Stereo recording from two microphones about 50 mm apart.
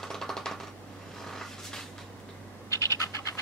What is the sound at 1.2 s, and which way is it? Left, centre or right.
Vehicle, centre.